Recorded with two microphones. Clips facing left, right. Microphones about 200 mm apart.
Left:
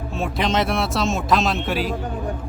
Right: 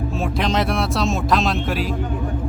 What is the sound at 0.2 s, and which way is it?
Speech, centre (ahead or behind).